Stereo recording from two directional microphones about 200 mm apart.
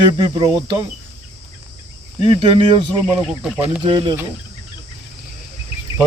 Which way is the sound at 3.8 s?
20° right (ahead or behind).